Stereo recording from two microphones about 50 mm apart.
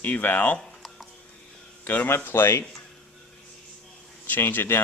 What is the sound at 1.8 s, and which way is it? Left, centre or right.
Speech, left.